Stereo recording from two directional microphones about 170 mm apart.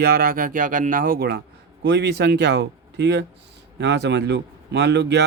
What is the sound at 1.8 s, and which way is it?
Speech, 90° right.